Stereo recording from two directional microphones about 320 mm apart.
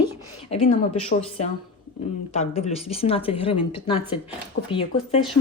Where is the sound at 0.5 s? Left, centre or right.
Left.